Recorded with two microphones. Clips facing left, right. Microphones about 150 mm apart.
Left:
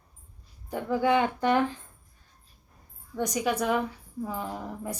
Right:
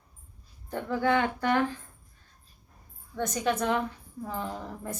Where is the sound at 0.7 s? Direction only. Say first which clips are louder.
Left 2 dB; 15° left (ahead or behind).